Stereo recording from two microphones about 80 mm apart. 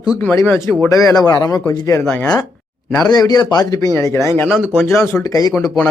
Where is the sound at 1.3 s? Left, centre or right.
Left.